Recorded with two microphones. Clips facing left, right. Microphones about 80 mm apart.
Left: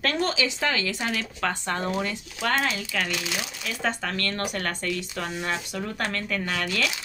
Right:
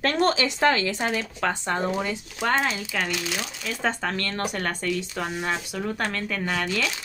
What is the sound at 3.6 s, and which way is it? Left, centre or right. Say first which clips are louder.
Speech: right 2 dB; centre.